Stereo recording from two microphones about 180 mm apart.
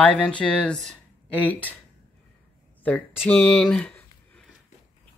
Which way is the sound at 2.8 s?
5° left (ahead or behind).